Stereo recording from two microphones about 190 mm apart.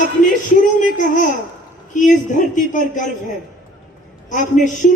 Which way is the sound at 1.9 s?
40° left (ahead or behind).